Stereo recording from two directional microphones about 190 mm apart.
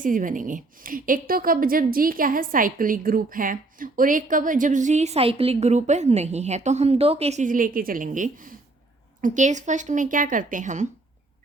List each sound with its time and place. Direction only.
0.0 s a woman's voice: 45° right (ahead or behind)